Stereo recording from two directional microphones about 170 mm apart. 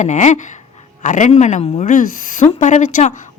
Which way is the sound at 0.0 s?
45° left (ahead or behind).